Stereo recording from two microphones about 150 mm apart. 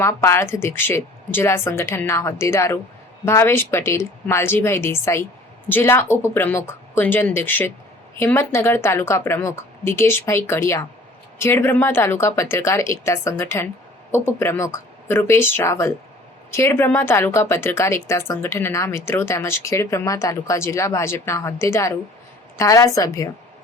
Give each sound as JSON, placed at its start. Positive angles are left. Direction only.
{"t": 0.0, "sound": "a woman's voice", "side_deg": 20}